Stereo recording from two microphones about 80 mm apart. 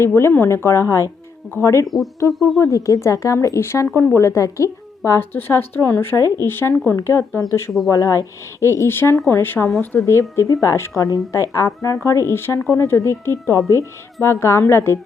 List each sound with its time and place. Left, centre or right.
0.0 s speech: left
7.9 s speech: left